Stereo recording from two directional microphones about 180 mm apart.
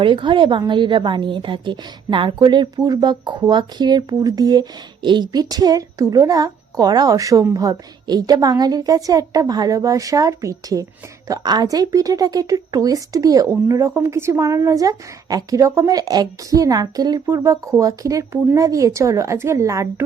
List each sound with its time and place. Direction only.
0.0 s speech: 25° right (ahead or behind)